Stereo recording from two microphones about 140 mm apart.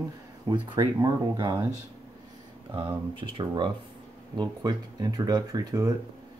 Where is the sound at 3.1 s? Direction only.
40° right (ahead or behind).